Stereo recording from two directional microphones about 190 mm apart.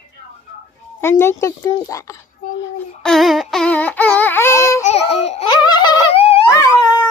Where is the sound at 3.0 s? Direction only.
Centre (ahead or behind).